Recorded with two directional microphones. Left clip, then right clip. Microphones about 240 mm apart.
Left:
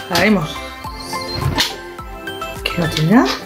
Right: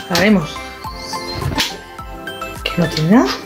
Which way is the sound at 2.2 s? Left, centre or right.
Centre.